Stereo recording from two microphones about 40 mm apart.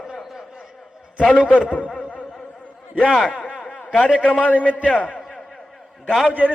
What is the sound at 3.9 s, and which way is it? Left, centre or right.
Speech, left.